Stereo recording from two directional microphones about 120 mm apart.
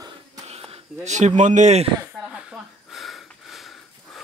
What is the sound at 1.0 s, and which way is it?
Speech, 80° right.